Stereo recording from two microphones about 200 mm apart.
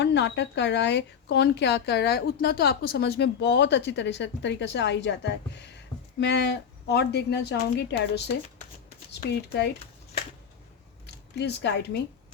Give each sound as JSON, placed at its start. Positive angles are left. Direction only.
{"t": 0.0, "sound": "speech", "side_deg": 60}
{"t": 9.2, "sound": "speech", "side_deg": 55}
{"t": 11.0, "sound": "a sound", "side_deg": 60}